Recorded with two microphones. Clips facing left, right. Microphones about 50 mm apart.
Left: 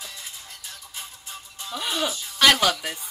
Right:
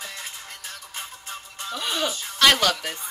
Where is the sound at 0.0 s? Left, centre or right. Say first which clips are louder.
Right 4 dB; right.